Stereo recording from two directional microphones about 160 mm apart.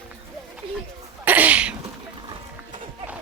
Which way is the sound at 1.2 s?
10° right (ahead or behind).